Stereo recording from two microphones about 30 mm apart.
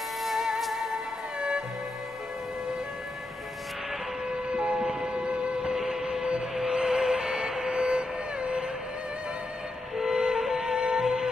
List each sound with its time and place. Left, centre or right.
0.2 s music: centre
4.3 s a sound: right
5.8 s a sound: centre
6.5 s music: centre
6.8 s music: centre
9.9 s music: centre
10.6 s music: right